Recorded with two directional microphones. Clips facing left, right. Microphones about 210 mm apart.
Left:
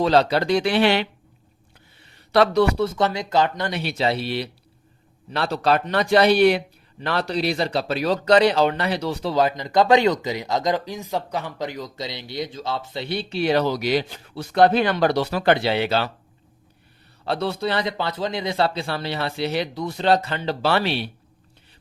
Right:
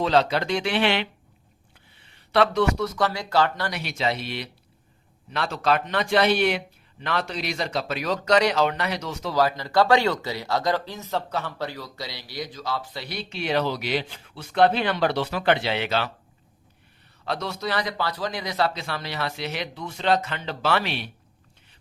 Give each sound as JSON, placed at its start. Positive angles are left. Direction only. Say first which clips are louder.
{"t": 0.0, "sound": "speech", "louder": "left 3 dB", "side_deg": 35}
{"t": 2.3, "sound": "speech", "louder": "left 3 dB", "side_deg": 40}
{"t": 17.2, "sound": "speech", "louder": "left 5 dB", "side_deg": 30}